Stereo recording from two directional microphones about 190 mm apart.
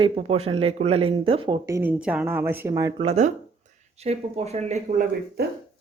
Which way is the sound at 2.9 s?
35° right (ahead or behind).